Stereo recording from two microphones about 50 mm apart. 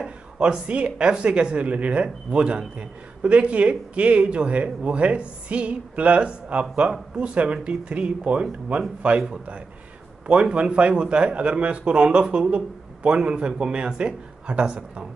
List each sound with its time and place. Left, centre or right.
0.0 s speech: centre
10.2 s speech: right